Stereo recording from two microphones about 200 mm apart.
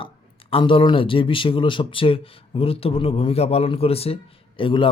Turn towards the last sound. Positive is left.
turn(degrees=25)  # may be behind; listen again after turning